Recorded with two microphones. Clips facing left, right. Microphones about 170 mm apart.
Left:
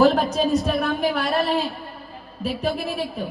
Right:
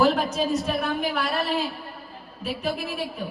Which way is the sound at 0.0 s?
35° left (ahead or behind).